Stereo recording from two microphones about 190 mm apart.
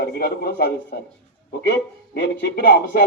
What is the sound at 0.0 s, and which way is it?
Speech, 55° left (ahead or behind).